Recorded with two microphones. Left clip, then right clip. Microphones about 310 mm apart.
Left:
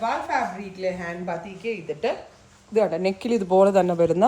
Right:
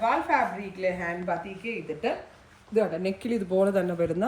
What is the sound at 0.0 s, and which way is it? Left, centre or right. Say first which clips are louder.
A woman's voice: even; left.